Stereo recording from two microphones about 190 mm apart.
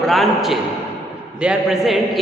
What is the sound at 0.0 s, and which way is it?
A man's voice, centre (ahead or behind).